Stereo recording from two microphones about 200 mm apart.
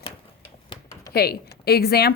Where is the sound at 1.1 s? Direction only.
50° left (ahead or behind).